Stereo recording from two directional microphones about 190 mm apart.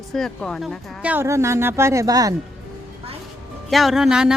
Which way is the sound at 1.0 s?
10° right (ahead or behind).